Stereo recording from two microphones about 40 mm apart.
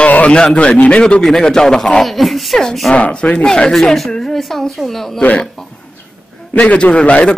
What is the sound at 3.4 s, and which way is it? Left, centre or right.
Speech, centre.